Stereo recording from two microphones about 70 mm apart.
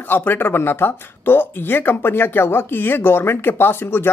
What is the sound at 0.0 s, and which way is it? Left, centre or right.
Speech, left.